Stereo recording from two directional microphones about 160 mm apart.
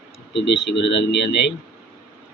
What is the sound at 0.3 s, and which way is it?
Speech, 90° left.